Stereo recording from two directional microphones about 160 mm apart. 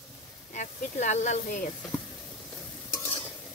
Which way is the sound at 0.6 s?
50° left (ahead or behind).